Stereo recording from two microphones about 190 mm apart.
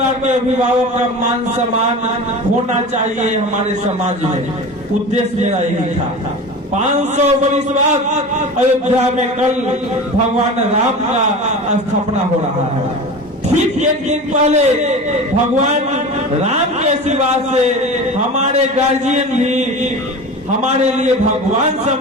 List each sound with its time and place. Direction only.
3.0 s a man's voice: 35° right (ahead or behind)
5.4 s a man's voice: 35° right (ahead or behind)
6.7 s a man's voice: 35° right (ahead or behind)
13.7 s a man's voice: 40° right (ahead or behind)
19.0 s a man's voice: 35° right (ahead or behind)